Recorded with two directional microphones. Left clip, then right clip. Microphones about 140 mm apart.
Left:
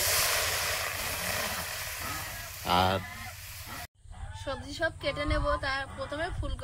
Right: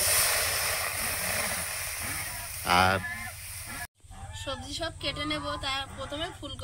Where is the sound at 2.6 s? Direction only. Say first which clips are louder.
Right 3 dB; 5° left (ahead or behind).